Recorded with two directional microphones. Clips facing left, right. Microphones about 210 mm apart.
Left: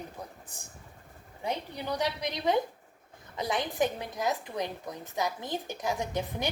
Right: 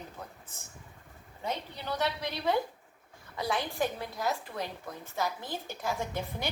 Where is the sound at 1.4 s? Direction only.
15° left (ahead or behind).